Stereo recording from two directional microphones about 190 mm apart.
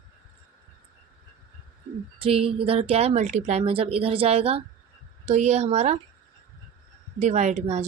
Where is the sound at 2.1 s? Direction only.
30° right (ahead or behind).